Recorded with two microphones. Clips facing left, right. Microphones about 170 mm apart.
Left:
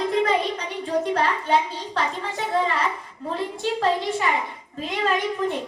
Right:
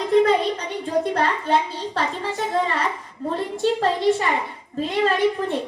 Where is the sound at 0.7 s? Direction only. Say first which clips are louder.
Left 1 dB; 35° right (ahead or behind).